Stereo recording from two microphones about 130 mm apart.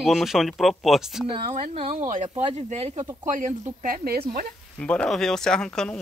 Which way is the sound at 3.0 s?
35° right (ahead or behind).